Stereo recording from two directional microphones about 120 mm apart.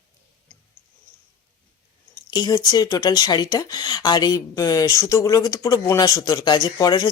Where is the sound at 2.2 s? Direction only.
35° left (ahead or behind).